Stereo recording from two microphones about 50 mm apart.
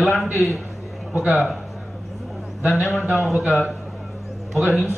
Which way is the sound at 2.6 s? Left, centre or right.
Centre.